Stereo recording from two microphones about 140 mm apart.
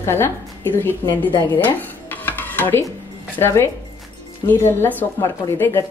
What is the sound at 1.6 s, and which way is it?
Dishes, 15° left (ahead or behind).